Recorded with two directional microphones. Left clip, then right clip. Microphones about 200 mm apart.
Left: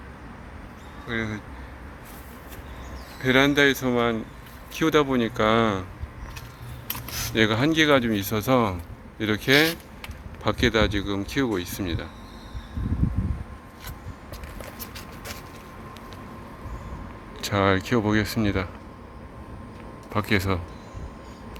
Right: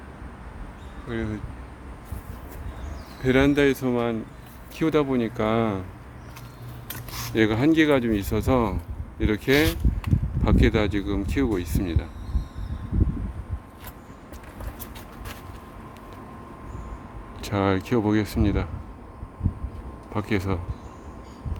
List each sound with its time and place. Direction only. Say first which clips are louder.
1.0 s speech: left 2 dB; 15° right (ahead or behind)
3.2 s speech: left 1 dB; 15° right (ahead or behind)
7.3 s speech: right 1 dB; 15° right (ahead or behind)
17.4 s speech: left 2 dB; 10° right (ahead or behind)
20.1 s speech: left 3 dB; 5° right (ahead or behind)